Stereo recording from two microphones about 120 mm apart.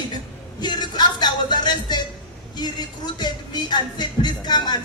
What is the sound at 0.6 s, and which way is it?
Music, 35° left (ahead or behind).